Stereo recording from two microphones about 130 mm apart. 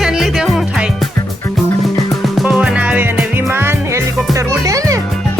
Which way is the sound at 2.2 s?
Centre (ahead or behind).